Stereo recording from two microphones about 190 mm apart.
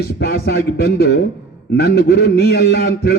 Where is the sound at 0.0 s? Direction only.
55° left (ahead or behind).